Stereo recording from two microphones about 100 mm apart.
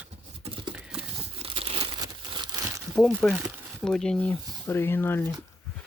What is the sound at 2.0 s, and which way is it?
Crumpling, 50° right (ahead or behind).